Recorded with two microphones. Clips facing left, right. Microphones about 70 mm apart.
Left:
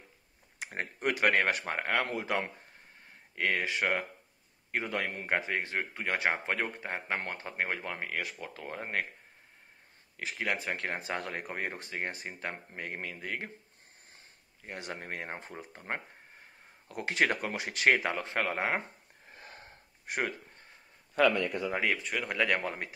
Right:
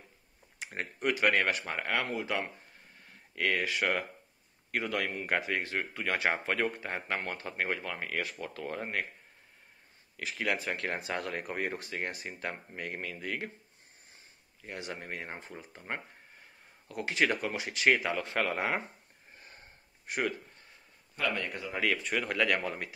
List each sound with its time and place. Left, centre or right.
0.7 s a man's voice: left
2.0 s speech: left
3.3 s a man's voice: left
7.2 s a man's voice: left
8.0 s speech: centre
10.1 s speech: left
14.6 s a man's voice: left
18.1 s speech: left
19.3 s wheeze: left
20.1 s speech: left
22.2 s speech: centre
22.6 s a man's voice: left